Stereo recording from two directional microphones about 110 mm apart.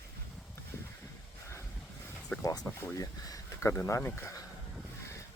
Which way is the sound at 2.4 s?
30° left (ahead or behind).